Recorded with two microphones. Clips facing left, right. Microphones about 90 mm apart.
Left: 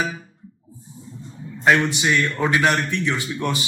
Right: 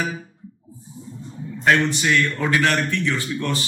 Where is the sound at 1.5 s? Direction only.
15° left (ahead or behind).